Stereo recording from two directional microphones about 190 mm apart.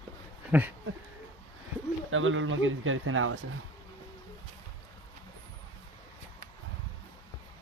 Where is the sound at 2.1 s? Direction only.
90° right.